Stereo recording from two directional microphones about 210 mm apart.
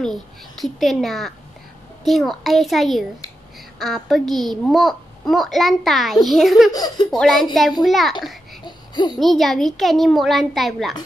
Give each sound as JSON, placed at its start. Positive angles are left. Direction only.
{"t": 0.0, "sound": "a child's voice", "side_deg": 0}
{"t": 6.7, "sound": "speech", "side_deg": 20}
{"t": 7.1, "sound": "a child's voice", "side_deg": 0}
{"t": 8.6, "sound": "a sound", "side_deg": 20}
{"t": 9.2, "sound": "a child's voice", "side_deg": 0}